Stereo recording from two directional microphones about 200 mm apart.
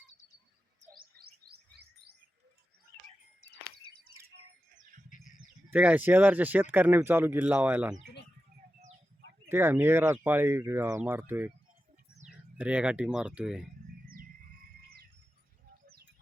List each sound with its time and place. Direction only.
0.9 s chirp: 50° right (ahead or behind)
5.0 s bird: 40° left (ahead or behind)
5.7 s speech: 5° right (ahead or behind)
9.5 s speech: 10° right (ahead or behind)
12.5 s speech: 5° right (ahead or behind)